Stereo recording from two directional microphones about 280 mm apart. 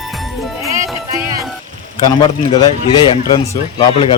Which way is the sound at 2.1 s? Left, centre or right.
Centre.